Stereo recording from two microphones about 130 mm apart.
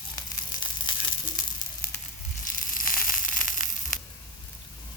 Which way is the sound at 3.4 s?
90° left.